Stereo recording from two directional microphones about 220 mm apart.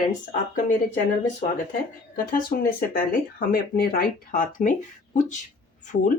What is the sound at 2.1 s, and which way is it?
Speech, 40° left (ahead or behind).